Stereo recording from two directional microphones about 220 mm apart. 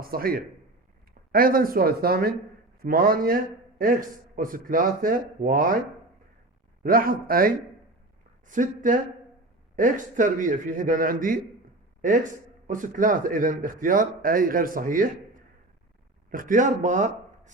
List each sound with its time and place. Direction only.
0.0 s a man's voice: 40° right (ahead or behind)
6.8 s a man's voice: 40° right (ahead or behind)